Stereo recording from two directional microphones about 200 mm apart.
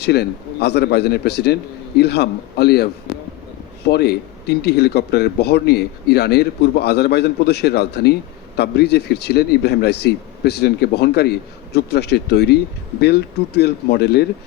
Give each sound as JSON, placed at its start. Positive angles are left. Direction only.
{"t": 0.0, "sound": "a man's voice", "side_deg": 55}